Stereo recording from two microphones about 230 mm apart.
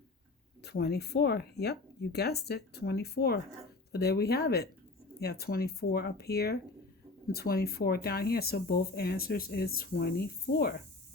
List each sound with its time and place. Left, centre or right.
0.6 s speech: left